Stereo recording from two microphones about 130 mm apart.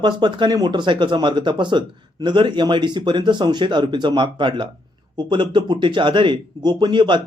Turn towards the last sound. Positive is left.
turn(degrees=-35)  # may be behind; listen again after turning